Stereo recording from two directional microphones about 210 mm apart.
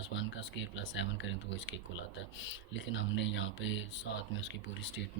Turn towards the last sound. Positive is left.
turn(degrees=60)  # may be behind; listen again after turning